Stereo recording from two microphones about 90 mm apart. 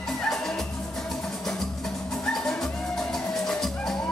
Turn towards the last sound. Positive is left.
turn(degrees=5)  # may be behind; listen again after turning